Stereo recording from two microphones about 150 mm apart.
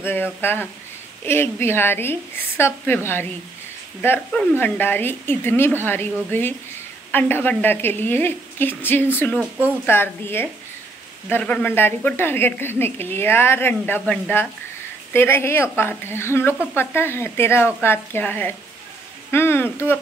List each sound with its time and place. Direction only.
0.0 s a woman's voice: 15° left (ahead or behind)